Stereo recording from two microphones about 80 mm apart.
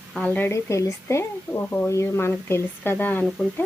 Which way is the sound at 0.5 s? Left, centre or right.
Left.